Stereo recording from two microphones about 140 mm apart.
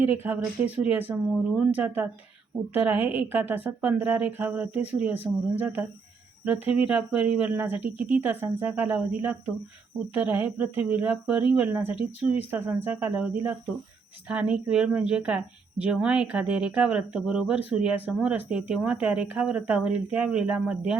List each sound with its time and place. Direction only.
0.0 s speech: 15° right (ahead or behind)
14.3 s speech: 10° right (ahead or behind)